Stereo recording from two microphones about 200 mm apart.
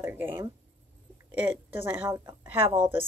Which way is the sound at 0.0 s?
10° right (ahead or behind).